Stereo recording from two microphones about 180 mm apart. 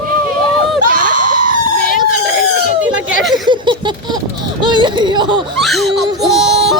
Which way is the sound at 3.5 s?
25° right (ahead or behind).